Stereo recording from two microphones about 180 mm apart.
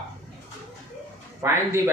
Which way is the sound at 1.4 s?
15° right (ahead or behind).